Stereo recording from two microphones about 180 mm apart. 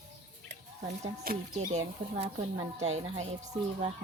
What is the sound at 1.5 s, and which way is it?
Speech, 40° right (ahead or behind).